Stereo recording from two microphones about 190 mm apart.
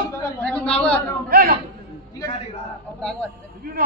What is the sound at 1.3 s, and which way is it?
Speech, 50° right (ahead or behind).